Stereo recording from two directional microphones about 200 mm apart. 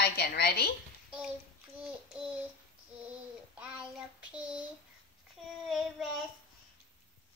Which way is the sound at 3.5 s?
5° right (ahead or behind).